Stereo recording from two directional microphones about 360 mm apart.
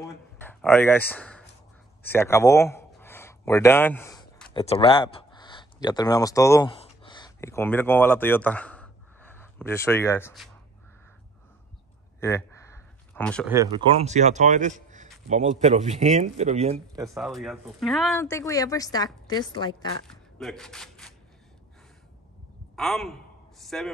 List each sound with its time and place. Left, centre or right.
0.4 s speech: centre
12.2 s a sound: centre
13.6 s a man's voice: centre
20.1 s speech: centre
22.8 s speech: centre